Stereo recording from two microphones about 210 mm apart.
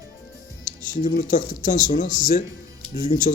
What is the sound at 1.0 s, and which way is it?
Speech, 40° left (ahead or behind).